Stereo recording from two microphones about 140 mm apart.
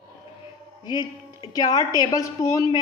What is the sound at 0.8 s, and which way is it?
A woman's voice, 30° left (ahead or behind).